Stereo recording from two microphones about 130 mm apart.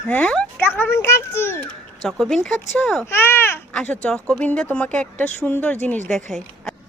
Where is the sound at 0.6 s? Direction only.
15° left (ahead or behind).